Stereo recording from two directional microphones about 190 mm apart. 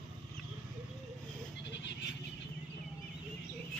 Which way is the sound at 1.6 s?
65° left (ahead or behind).